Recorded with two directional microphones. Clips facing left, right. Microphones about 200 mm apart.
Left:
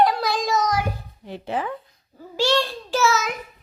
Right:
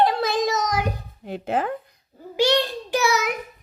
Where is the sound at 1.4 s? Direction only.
50° right (ahead or behind).